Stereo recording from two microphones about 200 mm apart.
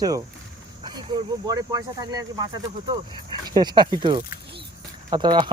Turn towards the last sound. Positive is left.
turn(degrees=-25)  # may be behind; listen again after turning